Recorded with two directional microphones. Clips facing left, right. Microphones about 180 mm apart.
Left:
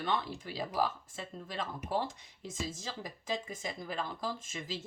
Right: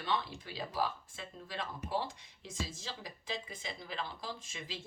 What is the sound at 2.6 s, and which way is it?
Speech, 45° left (ahead or behind).